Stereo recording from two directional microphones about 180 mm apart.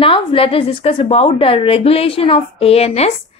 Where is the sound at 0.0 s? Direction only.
30° left (ahead or behind).